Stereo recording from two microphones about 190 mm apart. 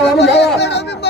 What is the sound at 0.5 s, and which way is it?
Chatter, 65° left (ahead or behind).